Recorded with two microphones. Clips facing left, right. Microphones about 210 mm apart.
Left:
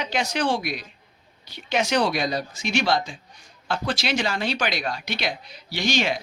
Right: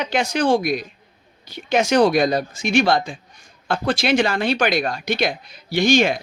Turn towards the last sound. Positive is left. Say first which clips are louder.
# right 8 dB
turn(degrees=-50)  # may be behind; listen again after turning